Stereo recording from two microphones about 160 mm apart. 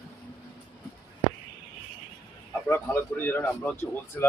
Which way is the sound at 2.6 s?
15° left (ahead or behind).